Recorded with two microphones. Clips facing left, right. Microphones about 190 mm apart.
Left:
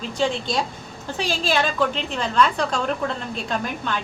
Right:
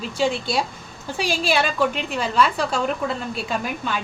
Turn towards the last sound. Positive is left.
turn(degrees=-5)  # may be behind; listen again after turning